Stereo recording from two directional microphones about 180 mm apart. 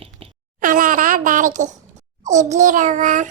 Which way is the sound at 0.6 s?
50° right (ahead or behind).